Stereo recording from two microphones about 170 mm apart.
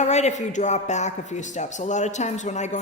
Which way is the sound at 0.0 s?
40° left (ahead or behind).